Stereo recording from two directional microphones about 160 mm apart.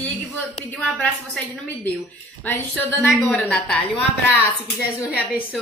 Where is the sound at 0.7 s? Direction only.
5° left (ahead or behind).